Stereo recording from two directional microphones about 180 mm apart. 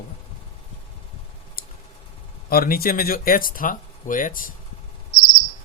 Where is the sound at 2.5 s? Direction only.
55° left (ahead or behind).